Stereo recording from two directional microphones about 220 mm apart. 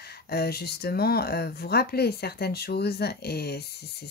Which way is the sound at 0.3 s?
45° left (ahead or behind).